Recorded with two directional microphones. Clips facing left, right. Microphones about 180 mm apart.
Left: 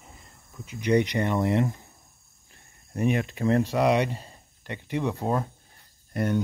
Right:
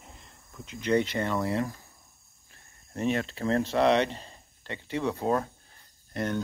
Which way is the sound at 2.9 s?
15° left (ahead or behind).